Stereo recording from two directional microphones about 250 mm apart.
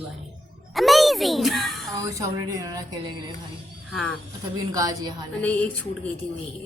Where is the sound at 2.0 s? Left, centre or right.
Centre.